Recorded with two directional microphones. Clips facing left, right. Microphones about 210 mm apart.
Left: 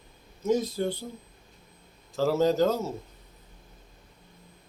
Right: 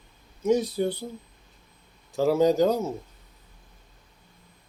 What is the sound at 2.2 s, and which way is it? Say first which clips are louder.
Speech: right 3 dB; 15° right (ahead or behind).